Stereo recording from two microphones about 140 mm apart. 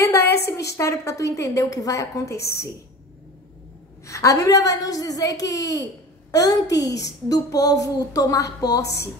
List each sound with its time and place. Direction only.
0.0 s a woman's voice: 20° left (ahead or behind)
4.0 s a woman's voice: 20° left (ahead or behind)